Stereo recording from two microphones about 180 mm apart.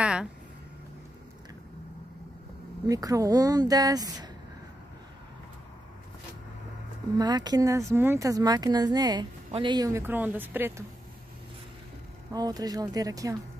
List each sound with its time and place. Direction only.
0.0 s a sound: 5° right (ahead or behind)
2.9 s speech: 20° right (ahead or behind)
7.2 s speech: 20° right (ahead or behind)
12.3 s speech: 20° right (ahead or behind)